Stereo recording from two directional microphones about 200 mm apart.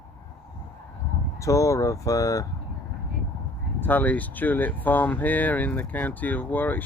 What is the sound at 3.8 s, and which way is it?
Speech, 10° left (ahead or behind).